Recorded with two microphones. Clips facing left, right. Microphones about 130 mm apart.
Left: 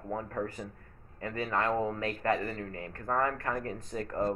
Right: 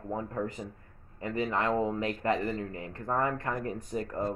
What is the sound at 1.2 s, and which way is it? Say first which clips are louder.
Speech: right 1 dB; 20° right (ahead or behind).